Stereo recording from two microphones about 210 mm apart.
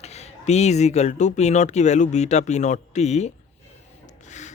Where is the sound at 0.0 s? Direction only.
30° left (ahead or behind).